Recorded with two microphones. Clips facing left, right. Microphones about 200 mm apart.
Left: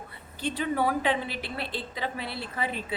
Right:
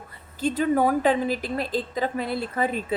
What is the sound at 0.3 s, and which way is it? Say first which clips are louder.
A woman's voice: right 6 dB; 45° right (ahead or behind).